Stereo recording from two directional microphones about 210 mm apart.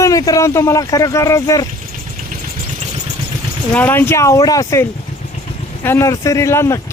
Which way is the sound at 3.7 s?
10° left (ahead or behind).